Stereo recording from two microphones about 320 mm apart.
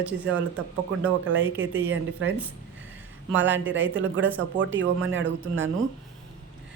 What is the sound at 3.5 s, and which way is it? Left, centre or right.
Speech, right.